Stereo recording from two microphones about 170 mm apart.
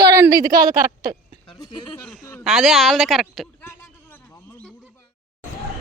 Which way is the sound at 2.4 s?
Centre (ahead or behind).